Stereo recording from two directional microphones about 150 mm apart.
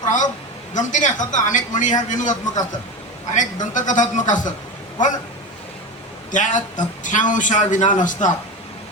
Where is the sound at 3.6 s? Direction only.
60° left (ahead or behind).